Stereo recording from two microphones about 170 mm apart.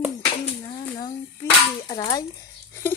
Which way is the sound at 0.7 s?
25° left (ahead or behind).